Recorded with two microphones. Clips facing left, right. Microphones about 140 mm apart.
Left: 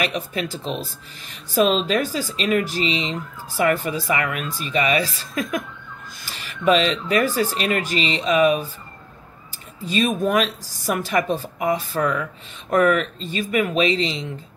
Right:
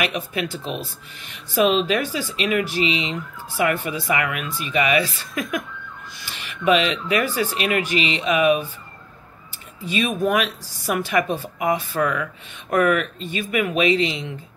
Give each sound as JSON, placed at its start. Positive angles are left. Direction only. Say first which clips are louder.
{"t": 0.0, "sound": "speech", "louder": "even", "side_deg": 35}
{"t": 9.8, "sound": "speech", "louder": "left 1 dB", "side_deg": 40}